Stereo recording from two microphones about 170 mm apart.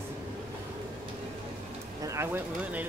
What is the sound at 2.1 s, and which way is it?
Speech, 10° right (ahead or behind).